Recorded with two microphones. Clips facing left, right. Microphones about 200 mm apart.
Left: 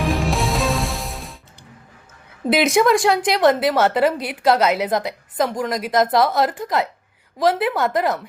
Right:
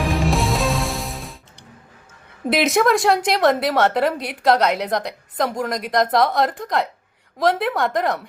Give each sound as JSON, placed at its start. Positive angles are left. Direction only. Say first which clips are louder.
{"t": 0.0, "sound": "music", "louder": "even", "side_deg": 0}
{"t": 2.5, "sound": "a woman's voice", "louder": "left 1 dB", "side_deg": 0}